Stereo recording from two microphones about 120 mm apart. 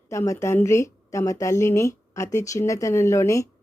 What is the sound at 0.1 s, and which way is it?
A woman's voice, 25° left (ahead or behind).